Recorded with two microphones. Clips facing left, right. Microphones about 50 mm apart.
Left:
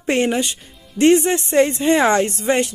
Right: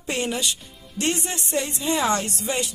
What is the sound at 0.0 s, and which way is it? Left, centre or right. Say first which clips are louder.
Speech: left 8 dB; left.